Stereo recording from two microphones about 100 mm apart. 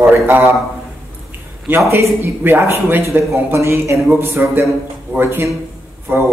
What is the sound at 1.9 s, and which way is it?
Speech, 25° right (ahead or behind).